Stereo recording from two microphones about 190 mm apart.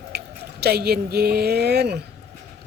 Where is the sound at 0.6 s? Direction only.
60° right (ahead or behind).